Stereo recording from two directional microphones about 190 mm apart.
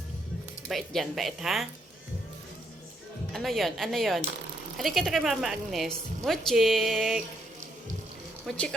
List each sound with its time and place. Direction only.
0.7 s a woman's voice: centre (ahead or behind)
3.3 s a woman's voice: centre (ahead or behind)
8.4 s a woman's voice: 5° left (ahead or behind)